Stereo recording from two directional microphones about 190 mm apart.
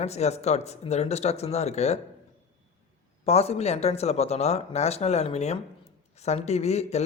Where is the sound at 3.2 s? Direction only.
35° left (ahead or behind).